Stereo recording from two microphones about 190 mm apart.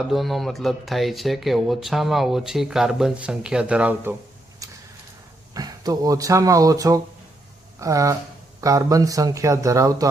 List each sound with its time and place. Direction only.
0.1 s speech: centre (ahead or behind)
4.6 s vehicle: 20° right (ahead or behind)
5.5 s speech: 20° right (ahead or behind)